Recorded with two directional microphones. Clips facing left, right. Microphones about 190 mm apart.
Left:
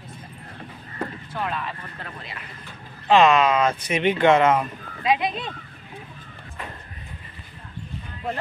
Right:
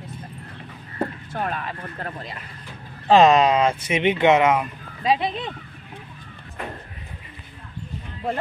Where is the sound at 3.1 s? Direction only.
40° right (ahead or behind); by 4.7 s 10° right (ahead or behind).